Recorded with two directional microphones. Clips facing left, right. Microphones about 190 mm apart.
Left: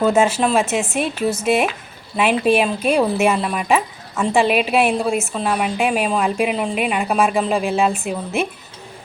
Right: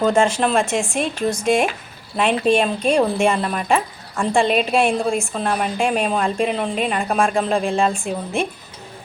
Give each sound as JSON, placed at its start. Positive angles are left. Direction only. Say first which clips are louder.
{"t": 0.0, "sound": "speech", "louder": "left 1 dB", "side_deg": 5}